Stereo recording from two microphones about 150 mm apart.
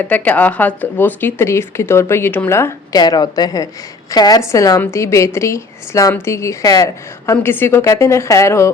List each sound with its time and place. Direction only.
0.0 s a woman's voice: 10° left (ahead or behind)